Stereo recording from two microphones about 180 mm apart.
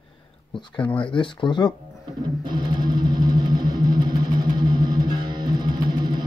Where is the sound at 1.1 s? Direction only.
25° left (ahead or behind).